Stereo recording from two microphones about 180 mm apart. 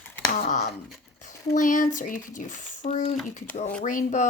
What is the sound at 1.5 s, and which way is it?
Speech, 45° left (ahead or behind).